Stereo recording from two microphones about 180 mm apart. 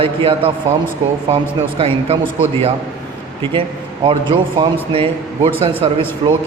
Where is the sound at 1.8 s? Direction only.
30° right (ahead or behind).